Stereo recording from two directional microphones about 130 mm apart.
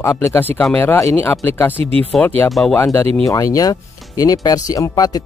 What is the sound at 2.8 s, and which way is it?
Speech, 20° left (ahead or behind).